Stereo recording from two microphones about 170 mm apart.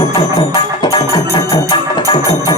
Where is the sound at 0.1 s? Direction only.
25° left (ahead or behind).